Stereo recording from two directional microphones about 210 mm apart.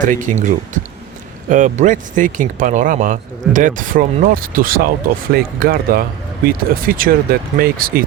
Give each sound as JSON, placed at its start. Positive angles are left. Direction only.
{"t": 0.0, "sound": "speech", "side_deg": -40}